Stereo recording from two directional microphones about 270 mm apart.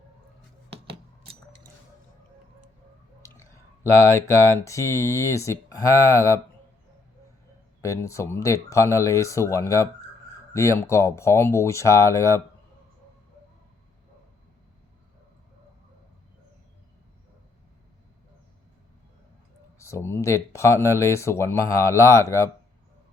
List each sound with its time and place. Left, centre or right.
0.7 s a sound: right
3.2 s clicking: centre
3.9 s speech: centre
7.8 s speech: centre
19.8 s speech: centre